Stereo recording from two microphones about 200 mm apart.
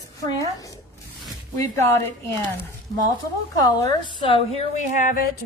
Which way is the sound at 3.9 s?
25° left (ahead or behind).